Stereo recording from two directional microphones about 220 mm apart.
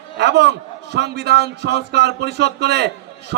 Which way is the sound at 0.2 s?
50° right (ahead or behind).